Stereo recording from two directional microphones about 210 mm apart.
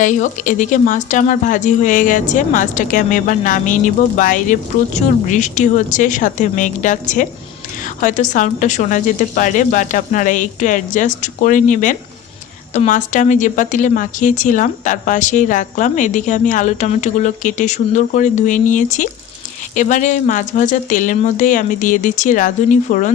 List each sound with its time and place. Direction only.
0.0 s a woman's voice: 35° left (ahead or behind)